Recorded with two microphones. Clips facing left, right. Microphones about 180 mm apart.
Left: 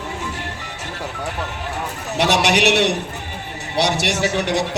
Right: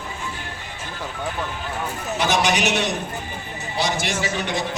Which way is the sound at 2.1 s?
70° left (ahead or behind).